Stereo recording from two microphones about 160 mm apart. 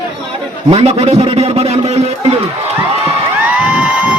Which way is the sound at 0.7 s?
40° right (ahead or behind).